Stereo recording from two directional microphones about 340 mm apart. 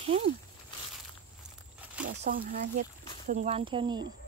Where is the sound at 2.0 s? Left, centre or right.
Right.